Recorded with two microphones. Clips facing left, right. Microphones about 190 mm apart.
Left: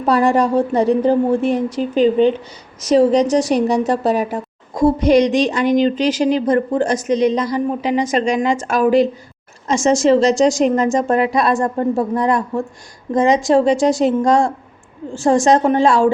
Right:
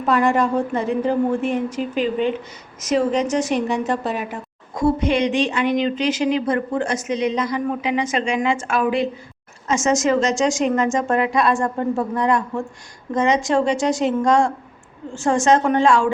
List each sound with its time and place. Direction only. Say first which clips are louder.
0.0 s a woman's voice: left 3 dB; 35° left (ahead or behind)